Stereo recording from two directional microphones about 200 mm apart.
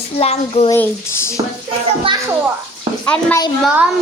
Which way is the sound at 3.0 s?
10° left (ahead or behind).